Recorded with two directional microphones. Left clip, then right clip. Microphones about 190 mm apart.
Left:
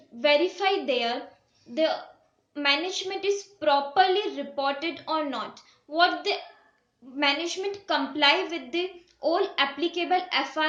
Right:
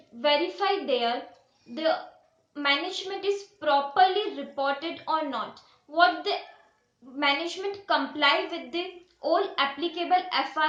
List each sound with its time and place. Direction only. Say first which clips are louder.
0.2 s a woman's voice: left 2 dB; 20° right (ahead or behind)
2.6 s a woman's voice: left 1 dB; 20° right (ahead or behind)